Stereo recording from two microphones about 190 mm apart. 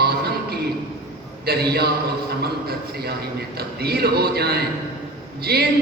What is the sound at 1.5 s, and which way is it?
A man's voice, 55° right (ahead or behind).